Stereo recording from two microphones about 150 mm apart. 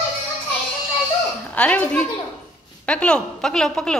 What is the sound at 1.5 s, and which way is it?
A woman's voice, 10° left (ahead or behind).